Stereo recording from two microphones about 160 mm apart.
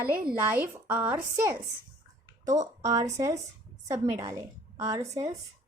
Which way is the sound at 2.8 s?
20° right (ahead or behind).